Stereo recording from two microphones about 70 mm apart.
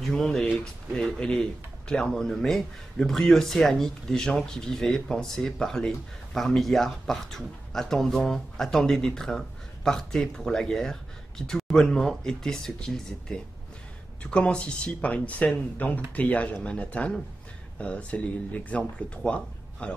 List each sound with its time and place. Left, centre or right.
0.0 s speech: centre